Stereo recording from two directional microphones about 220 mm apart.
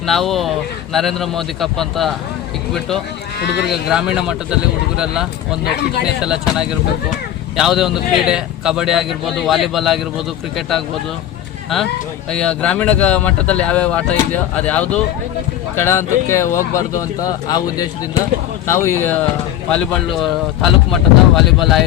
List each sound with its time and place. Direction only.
0.0 s speech: centre (ahead or behind)
3.4 s speech: 50° left (ahead or behind)
3.7 s speech: 5° right (ahead or behind)
12.3 s speech: 5° left (ahead or behind)
18.7 s speech: 10° left (ahead or behind)